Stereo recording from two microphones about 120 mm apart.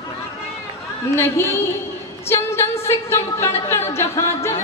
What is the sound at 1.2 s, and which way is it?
Speech, 20° left (ahead or behind).